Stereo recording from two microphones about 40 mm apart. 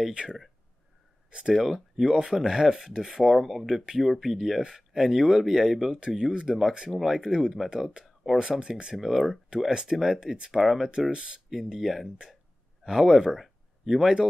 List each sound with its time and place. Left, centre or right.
0.1 s speech: centre
1.5 s speech: centre
6.4 s speech: centre
8.4 s speech: right
8.9 s speech: centre
9.7 s speech: centre
10.3 s speech: centre
10.6 s speech: centre
11.1 s speech: right
11.5 s speech: centre